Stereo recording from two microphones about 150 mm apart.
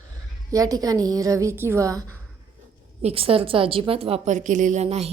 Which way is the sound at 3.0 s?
40° right (ahead or behind).